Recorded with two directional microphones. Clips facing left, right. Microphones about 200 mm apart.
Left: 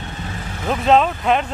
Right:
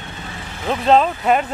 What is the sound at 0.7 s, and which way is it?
Speech, centre (ahead or behind).